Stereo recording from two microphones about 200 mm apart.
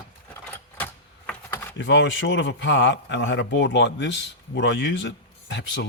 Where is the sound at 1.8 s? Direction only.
65° left (ahead or behind).